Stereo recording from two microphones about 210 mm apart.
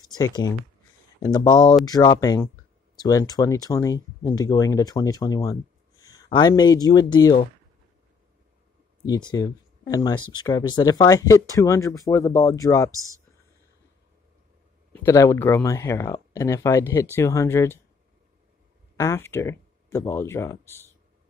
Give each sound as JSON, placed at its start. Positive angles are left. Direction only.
{"t": 0.2, "sound": "speech", "side_deg": 15}
{"t": 9.0, "sound": "speech", "side_deg": 20}
{"t": 12.9, "sound": "speech", "side_deg": -15}
{"t": 14.9, "sound": "speech", "side_deg": 15}
{"t": 18.9, "sound": "speech", "side_deg": 10}